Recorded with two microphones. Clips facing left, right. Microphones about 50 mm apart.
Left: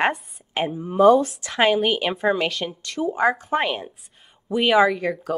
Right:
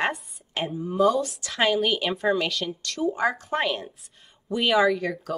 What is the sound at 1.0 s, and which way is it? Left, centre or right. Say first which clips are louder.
Speech: left 9 dB; left.